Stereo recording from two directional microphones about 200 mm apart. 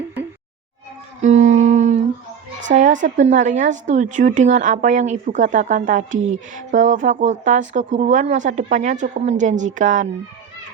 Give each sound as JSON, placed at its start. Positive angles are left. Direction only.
{"t": 1.2, "sound": "humming", "side_deg": -35}
{"t": 2.6, "sound": "a woman's voice", "side_deg": -40}